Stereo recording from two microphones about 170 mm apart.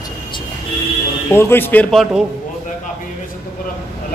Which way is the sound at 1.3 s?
15° left (ahead or behind).